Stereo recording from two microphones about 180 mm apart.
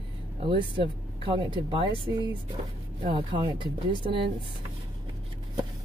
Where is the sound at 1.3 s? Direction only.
25° right (ahead or behind).